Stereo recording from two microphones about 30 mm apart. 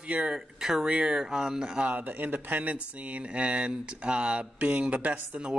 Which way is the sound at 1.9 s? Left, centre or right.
Right.